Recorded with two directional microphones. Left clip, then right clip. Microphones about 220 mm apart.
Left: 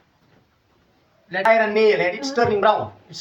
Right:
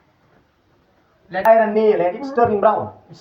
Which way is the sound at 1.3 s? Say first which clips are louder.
Right 3 dB; 5° left (ahead or behind).